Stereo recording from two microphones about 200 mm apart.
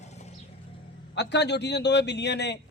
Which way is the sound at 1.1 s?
60° left (ahead or behind).